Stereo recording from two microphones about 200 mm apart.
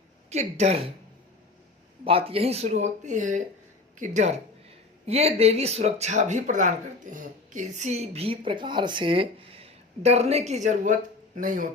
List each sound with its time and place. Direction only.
0.3 s speech: 35° right (ahead or behind)
2.0 s speech: 30° right (ahead or behind)